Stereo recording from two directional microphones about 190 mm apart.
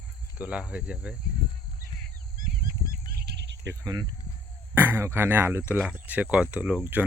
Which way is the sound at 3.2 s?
65° right (ahead or behind).